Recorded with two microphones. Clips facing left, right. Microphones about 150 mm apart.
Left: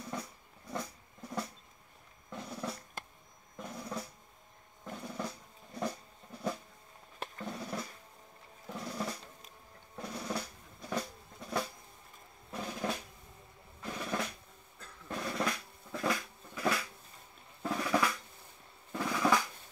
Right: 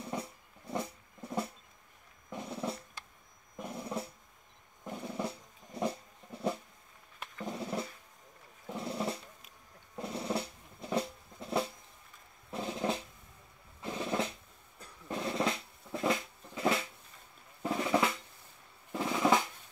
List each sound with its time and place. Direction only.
0.0 s drum: 25° right (ahead or behind)
13.8 s drum roll: 25° right (ahead or behind)
14.8 s drum: 25° right (ahead or behind)
18.9 s drum roll: 25° right (ahead or behind)